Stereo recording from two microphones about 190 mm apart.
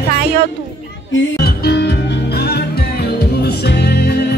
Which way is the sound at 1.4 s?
60° left (ahead or behind).